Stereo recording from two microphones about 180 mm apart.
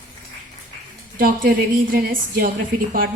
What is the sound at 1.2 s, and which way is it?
A woman's voice, 50° right (ahead or behind).